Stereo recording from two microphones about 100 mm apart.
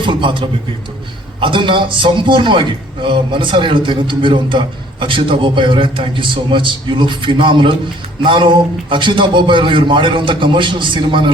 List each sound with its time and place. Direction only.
0.0 s a man's voice: 55° right (ahead or behind)